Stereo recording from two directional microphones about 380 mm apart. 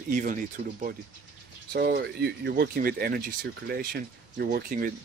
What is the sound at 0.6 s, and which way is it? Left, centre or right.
Speech, centre.